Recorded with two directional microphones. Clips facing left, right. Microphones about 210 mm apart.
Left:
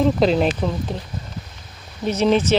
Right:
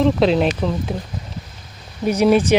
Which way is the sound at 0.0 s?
Centre (ahead or behind).